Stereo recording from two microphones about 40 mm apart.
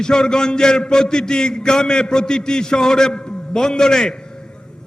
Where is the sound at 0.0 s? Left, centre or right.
Centre.